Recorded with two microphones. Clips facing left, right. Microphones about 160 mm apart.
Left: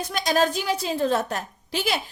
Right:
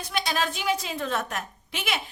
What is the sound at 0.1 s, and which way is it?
A woman's voice, 45° left (ahead or behind).